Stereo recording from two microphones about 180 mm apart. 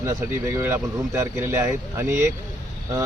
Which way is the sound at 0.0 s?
15° right (ahead or behind).